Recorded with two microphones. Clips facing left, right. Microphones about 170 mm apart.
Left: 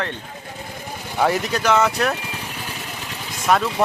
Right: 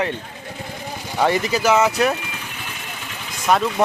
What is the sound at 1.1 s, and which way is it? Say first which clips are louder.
Speech: right 1 dB; centre (ahead or behind).